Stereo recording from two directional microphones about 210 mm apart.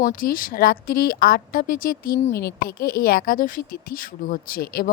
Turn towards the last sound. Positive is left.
turn(degrees=45)  # may be behind; listen again after turning